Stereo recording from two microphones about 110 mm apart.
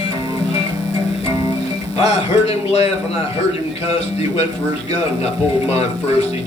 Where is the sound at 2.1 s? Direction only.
70° left (ahead or behind).